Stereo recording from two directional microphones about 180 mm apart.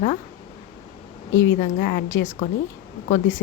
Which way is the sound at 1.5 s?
45° left (ahead or behind).